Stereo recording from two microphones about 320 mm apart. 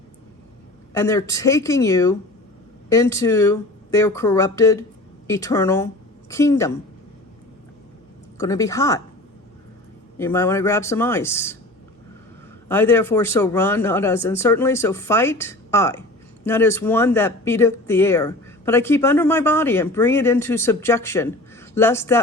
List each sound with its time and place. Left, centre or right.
0.9 s speech: centre
8.4 s speech: centre
10.2 s speech: centre
12.6 s speech: centre